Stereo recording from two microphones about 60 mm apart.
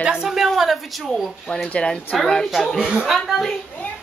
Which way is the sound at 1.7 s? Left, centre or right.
Centre.